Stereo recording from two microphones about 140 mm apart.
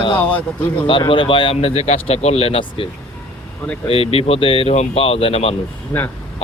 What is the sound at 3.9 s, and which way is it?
A man's voice, 45° left (ahead or behind).